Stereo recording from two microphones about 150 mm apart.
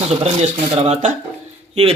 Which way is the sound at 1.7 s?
40° right (ahead or behind).